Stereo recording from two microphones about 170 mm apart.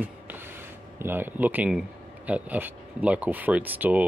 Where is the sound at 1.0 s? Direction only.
10° right (ahead or behind).